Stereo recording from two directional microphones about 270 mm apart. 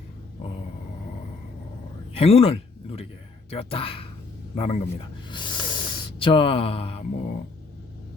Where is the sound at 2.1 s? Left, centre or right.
Left.